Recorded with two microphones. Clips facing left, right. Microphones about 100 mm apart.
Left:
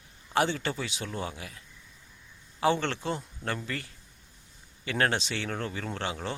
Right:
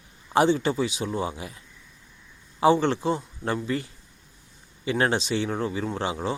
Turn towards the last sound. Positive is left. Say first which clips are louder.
# right 6 dB
turn(degrees=-20)  # may be behind; listen again after turning